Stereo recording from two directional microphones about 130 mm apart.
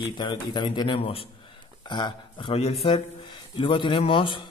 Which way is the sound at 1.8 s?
35° left (ahead or behind).